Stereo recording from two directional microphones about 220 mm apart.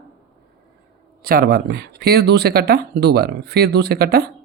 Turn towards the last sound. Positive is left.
turn(degrees=-45)  # may be behind; listen again after turning